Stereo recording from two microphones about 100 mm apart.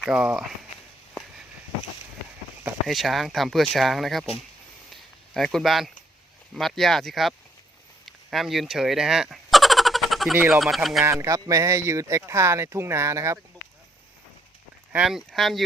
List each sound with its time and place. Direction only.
0.1 s speech: 10° right (ahead or behind)
2.8 s speech: centre (ahead or behind)
5.3 s speech: 5° left (ahead or behind)
8.0 s a sound: centre (ahead or behind)
10.5 s speech: centre (ahead or behind)
11.0 s speech: 30° right (ahead or behind)
14.9 s speech: 5° right (ahead or behind)